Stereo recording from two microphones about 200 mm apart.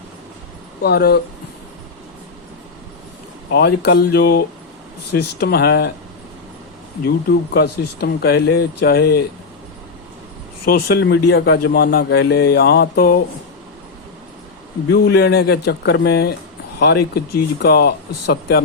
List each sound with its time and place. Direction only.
0.8 s a man's voice: 55° left (ahead or behind)
3.5 s a man's voice: 55° left (ahead or behind)
7.3 s a man's voice: 50° left (ahead or behind)
10.7 s a man's voice: 55° left (ahead or behind)
14.8 s a man's voice: 55° left (ahead or behind)